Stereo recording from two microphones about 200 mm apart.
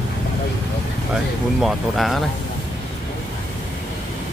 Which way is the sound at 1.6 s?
Centre (ahead or behind).